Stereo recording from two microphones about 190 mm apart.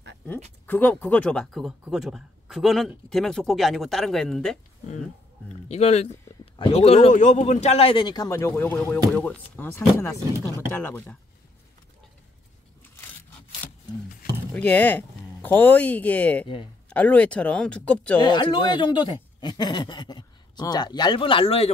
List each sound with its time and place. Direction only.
0.7 s speech: 10° left (ahead or behind)
5.7 s speech: 35° left (ahead or behind); by 11.1 s 10° left (ahead or behind)
14.5 s speech: 10° left (ahead or behind)
18.2 s speech: 25° left (ahead or behind)